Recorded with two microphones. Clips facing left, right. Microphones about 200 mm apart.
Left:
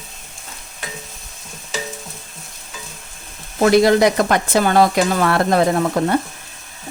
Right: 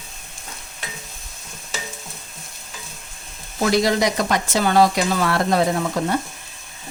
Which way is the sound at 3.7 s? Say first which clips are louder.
Left 6 dB; 55° left (ahead or behind).